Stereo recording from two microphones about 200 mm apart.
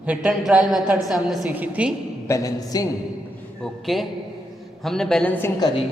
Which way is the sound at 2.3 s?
15° left (ahead or behind).